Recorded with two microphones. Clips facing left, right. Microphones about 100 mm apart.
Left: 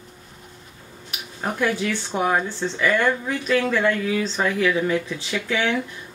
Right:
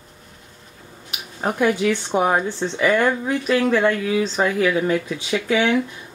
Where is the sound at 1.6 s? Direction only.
15° right (ahead or behind).